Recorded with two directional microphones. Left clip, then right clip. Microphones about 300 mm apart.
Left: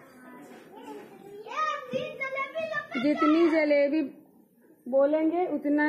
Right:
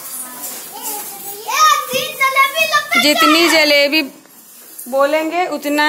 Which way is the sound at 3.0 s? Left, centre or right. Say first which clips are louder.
Right 11 dB; centre.